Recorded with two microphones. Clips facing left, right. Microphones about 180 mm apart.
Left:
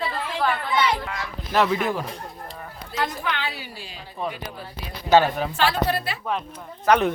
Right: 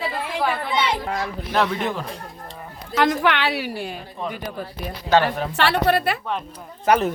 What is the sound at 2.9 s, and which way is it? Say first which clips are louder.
A woman's voice: right 8 dB; 90° right.